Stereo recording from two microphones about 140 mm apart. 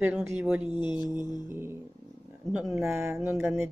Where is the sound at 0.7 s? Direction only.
35° left (ahead or behind).